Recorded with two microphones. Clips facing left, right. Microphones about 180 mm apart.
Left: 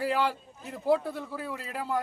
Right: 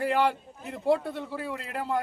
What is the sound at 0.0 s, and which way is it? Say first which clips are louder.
A man's voice: right 3 dB; centre (ahead or behind).